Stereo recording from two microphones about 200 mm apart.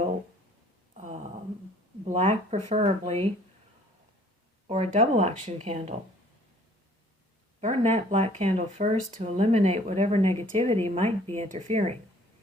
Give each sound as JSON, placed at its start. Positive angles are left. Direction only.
{"t": 0.9, "sound": "a sound", "side_deg": -35}
{"t": 2.0, "sound": "speech", "side_deg": -35}
{"t": 4.7, "sound": "speech", "side_deg": -35}
{"t": 7.6, "sound": "speech", "side_deg": -35}